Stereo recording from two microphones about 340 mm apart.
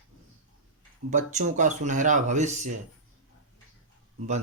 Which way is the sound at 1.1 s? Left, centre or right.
Right.